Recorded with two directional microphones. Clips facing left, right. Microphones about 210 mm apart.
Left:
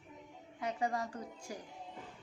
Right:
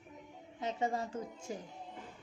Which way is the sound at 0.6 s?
25° right (ahead or behind).